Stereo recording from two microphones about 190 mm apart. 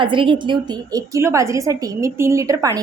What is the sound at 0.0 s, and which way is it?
A woman's voice, 25° right (ahead or behind).